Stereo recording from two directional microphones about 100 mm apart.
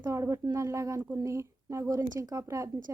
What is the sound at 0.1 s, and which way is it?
A woman's voice, 30° right (ahead or behind).